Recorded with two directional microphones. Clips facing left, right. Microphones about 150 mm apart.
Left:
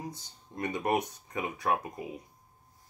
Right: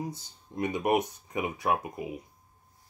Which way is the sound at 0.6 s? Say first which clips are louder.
Right 3 dB; 15° right (ahead or behind).